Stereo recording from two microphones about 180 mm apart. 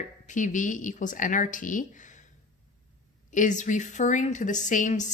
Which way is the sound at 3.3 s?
45° left (ahead or behind).